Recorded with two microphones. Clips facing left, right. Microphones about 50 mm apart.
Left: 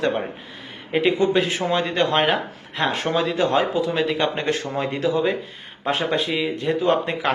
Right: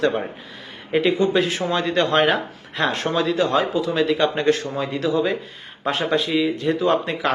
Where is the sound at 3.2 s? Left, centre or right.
Left.